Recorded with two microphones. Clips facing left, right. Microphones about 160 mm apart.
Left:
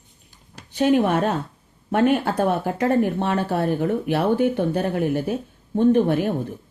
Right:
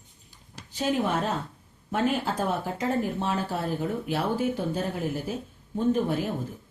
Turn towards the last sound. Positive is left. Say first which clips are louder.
# left 7 dB
turn(degrees=65)  # may be behind; listen again after turning